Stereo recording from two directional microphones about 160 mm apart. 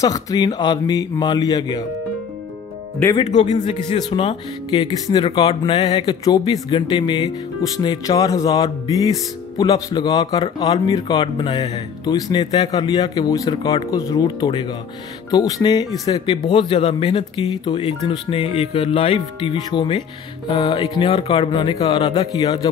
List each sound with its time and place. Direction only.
0.0 s speech: 20° left (ahead or behind)
3.3 s speech: 50° left (ahead or behind)
3.8 s speech: 35° left (ahead or behind)